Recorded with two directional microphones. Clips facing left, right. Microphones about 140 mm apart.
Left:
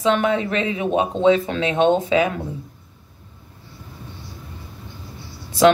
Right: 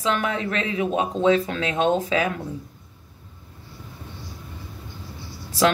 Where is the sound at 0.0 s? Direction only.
25° left (ahead or behind).